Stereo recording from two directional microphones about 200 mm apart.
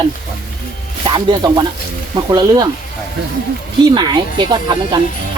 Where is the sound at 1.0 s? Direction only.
20° right (ahead or behind).